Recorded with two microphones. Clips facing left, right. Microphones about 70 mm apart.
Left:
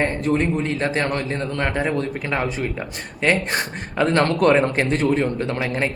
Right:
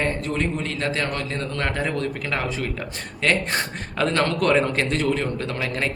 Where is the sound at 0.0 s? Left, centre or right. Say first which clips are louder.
Left 4 dB; left.